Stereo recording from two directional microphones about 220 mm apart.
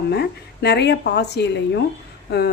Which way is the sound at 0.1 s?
50° left (ahead or behind).